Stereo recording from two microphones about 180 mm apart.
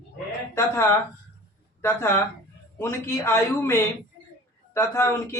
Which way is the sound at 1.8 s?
15° left (ahead or behind).